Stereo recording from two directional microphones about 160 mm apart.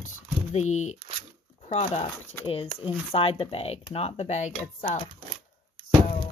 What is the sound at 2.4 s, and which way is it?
Speech, 35° left (ahead or behind).